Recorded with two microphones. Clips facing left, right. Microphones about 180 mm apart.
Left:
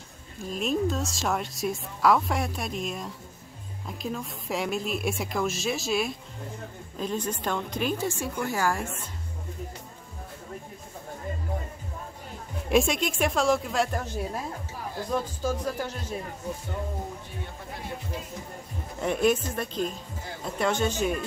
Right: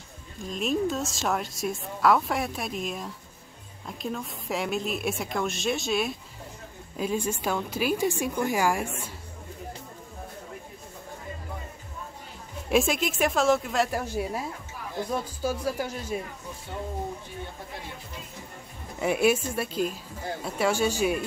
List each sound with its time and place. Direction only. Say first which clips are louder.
0.5 s a woman's voice: even; centre (ahead or behind)
12.6 s a woman's voice: even; centre (ahead or behind)
15.4 s a woman's voice: right 1 dB; 10° right (ahead or behind)
18.9 s a woman's voice: right 1 dB; 5° right (ahead or behind)